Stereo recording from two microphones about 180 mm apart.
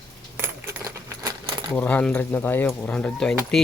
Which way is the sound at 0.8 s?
15° right (ahead or behind).